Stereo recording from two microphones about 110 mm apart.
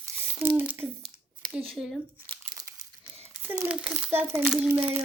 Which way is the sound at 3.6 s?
5° right (ahead or behind).